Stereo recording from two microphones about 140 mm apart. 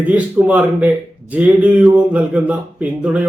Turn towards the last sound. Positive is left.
turn(degrees=-10)  # may be behind; listen again after turning